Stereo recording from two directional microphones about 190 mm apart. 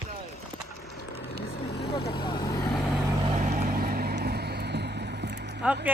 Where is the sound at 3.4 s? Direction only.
45° right (ahead or behind); by 5.6 s 60° right (ahead or behind).